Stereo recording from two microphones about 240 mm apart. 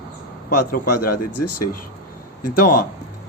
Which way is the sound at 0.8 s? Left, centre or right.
Left.